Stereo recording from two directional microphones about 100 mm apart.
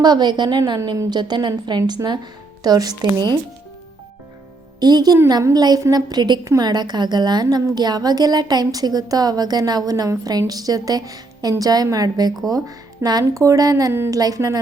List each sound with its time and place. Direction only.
0.0 s a woman's voice: 45° right (ahead or behind)
4.8 s a woman's voice: 40° right (ahead or behind)